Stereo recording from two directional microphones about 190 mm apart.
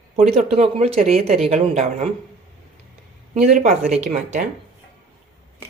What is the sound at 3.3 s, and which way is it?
Speech, 40° right (ahead or behind).